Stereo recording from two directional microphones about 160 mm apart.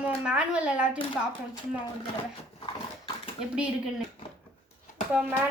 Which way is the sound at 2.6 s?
35° left (ahead or behind).